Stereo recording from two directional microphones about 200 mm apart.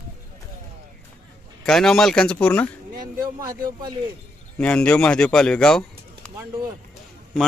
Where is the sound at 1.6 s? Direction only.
Centre (ahead or behind).